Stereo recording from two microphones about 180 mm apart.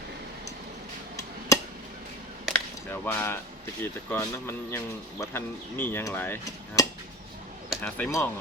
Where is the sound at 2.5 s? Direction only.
Centre (ahead or behind).